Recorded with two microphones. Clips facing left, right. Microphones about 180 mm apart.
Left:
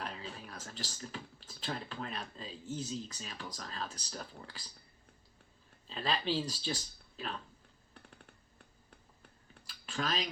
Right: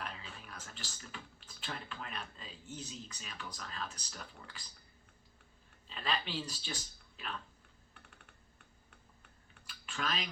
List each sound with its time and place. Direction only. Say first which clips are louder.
0.0 s speech: left 4 dB; 35° left (ahead or behind)
5.9 s speech: left 4 dB; 35° left (ahead or behind)
7.9 s a sound: left 5 dB; 35° left (ahead or behind)